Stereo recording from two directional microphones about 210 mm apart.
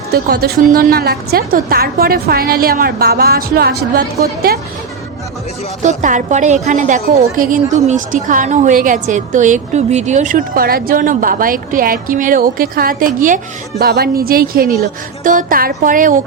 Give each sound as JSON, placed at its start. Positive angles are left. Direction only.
{"t": 0.1, "sound": "a woman's voice", "side_deg": -45}
{"t": 5.8, "sound": "a woman's voice", "side_deg": -35}